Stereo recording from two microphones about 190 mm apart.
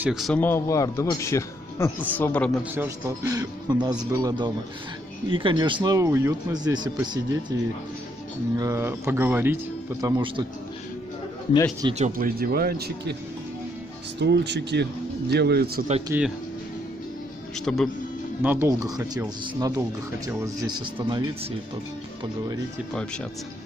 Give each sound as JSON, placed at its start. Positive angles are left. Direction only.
{"t": 0.0, "sound": "speech", "side_deg": 0}
{"t": 0.4, "sound": "a man's voice", "side_deg": 15}
{"t": 2.7, "sound": "speech", "side_deg": -15}
{"t": 8.5, "sound": "speech", "side_deg": -15}
{"t": 10.0, "sound": "speech", "side_deg": -20}
{"t": 11.9, "sound": "speech", "side_deg": -40}
{"t": 14.2, "sound": "speech", "side_deg": -65}
{"t": 16.1, "sound": "speech", "side_deg": -10}
{"t": 17.7, "sound": "speech", "side_deg": 5}
{"t": 18.4, "sound": "speech", "side_deg": -10}